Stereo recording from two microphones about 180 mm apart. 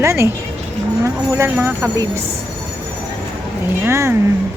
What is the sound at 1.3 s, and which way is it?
Speech, 10° right (ahead or behind).